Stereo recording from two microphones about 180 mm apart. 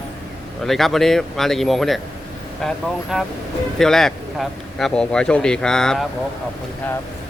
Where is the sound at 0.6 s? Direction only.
Centre (ahead or behind).